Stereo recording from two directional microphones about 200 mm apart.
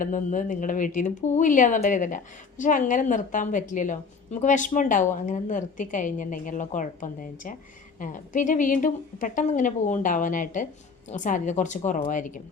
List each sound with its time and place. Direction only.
0.0 s speech: 40° left (ahead or behind)